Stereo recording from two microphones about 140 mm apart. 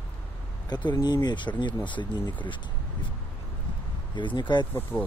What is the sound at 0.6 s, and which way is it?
Speech, 30° left (ahead or behind).